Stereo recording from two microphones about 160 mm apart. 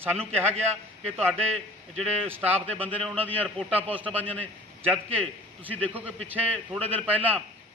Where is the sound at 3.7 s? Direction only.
10° right (ahead or behind).